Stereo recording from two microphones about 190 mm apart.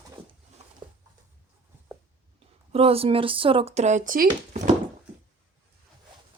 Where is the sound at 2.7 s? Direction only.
30° right (ahead or behind).